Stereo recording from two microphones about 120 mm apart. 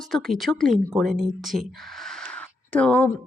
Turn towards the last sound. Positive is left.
turn(degrees=10)  # may be behind; listen again after turning